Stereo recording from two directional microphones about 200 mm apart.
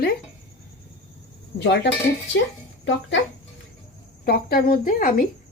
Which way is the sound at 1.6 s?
60° left (ahead or behind).